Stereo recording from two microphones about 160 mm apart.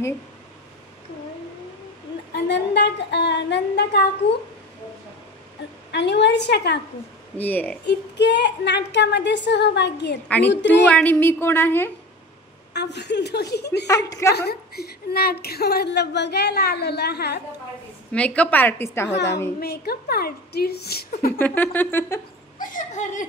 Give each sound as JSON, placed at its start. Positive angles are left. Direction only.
{"t": 2.3, "sound": "a woman's voice", "side_deg": 90}
{"t": 5.9, "sound": "a woman's voice", "side_deg": 90}
{"t": 7.3, "sound": "a woman's voice", "side_deg": 10}
{"t": 7.8, "sound": "a woman's voice", "side_deg": 90}
{"t": 10.2, "sound": "a woman's voice", "side_deg": 10}
{"t": 12.7, "sound": "a woman's voice", "side_deg": 90}
{"t": 14.0, "sound": "a woman's voice", "side_deg": 20}
{"t": 14.3, "sound": "a woman's voice", "side_deg": 80}
{"t": 18.1, "sound": "a woman's voice", "side_deg": 5}
{"t": 19.0, "sound": "a woman's voice", "side_deg": 90}
{"t": 19.6, "sound": "a woman's voice", "side_deg": 80}
{"t": 21.4, "sound": "a woman's voice", "side_deg": 10}
{"t": 22.6, "sound": "chuckle", "side_deg": 55}